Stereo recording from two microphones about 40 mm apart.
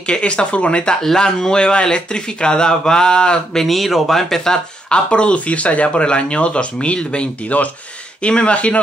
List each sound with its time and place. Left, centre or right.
0.1 s speech: left
3.6 s speech: centre
4.8 s speech: left
7.5 s speech: left
8.2 s speech: left